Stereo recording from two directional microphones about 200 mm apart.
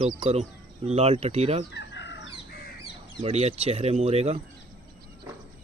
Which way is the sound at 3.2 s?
30° right (ahead or behind).